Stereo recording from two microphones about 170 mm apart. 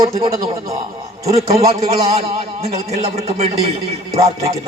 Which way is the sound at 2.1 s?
35° right (ahead or behind).